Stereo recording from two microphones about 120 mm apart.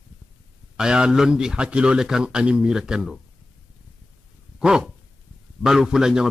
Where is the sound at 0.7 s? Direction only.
5° right (ahead or behind).